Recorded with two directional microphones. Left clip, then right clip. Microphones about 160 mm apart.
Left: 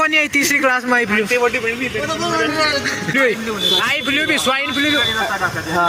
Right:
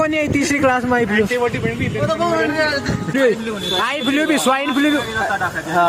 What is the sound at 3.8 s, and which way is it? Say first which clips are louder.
A man's voice: left 1 dB; 25° right (ahead or behind).